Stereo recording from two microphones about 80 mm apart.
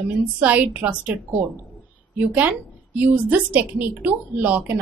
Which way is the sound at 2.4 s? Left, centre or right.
Centre.